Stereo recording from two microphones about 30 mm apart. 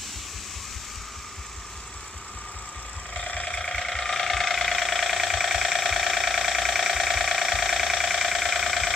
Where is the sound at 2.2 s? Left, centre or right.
Left.